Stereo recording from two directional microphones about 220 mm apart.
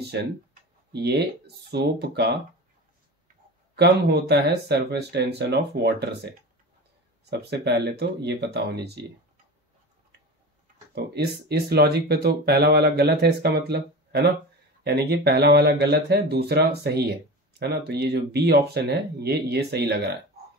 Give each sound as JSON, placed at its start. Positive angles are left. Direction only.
{"t": 0.1, "sound": "speech", "side_deg": -50}
{"t": 3.7, "sound": "speech", "side_deg": -50}
{"t": 11.1, "sound": "speech", "side_deg": -45}